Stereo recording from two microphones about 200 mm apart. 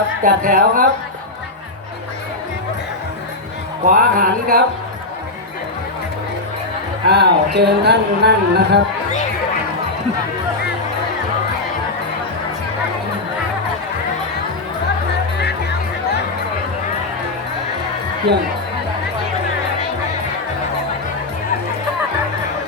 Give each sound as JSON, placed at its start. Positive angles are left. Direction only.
{"t": 0.2, "sound": "music", "side_deg": -45}
{"t": 3.8, "sound": "music", "side_deg": -45}
{"t": 7.1, "sound": "speech", "side_deg": -55}